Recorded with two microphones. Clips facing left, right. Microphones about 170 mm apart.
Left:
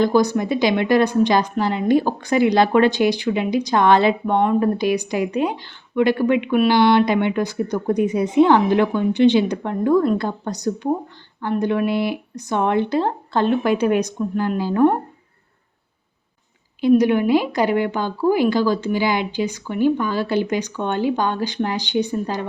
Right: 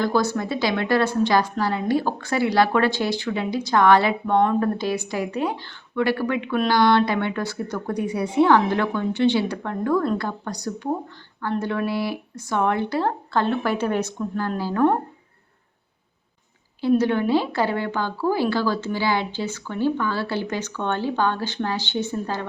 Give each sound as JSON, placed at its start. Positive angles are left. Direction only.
{"t": 0.0, "sound": "a woman's voice", "side_deg": 15}
{"t": 16.8, "sound": "speech", "side_deg": 15}